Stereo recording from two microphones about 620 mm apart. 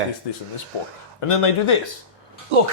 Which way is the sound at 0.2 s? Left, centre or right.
Left.